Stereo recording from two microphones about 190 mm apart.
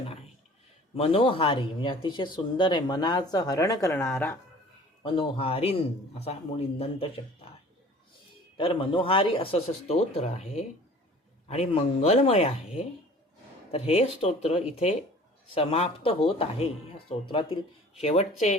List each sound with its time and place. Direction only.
0.9 s speech: 30° left (ahead or behind); by 4.4 s 10° left (ahead or behind)
5.0 s a man's voice: 30° left (ahead or behind)
8.5 s a man's voice: 25° left (ahead or behind)